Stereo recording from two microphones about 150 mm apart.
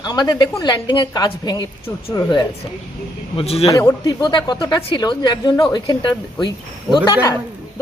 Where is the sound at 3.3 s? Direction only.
40° left (ahead or behind).